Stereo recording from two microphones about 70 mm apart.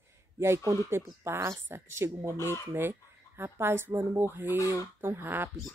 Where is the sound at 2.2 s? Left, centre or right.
Left.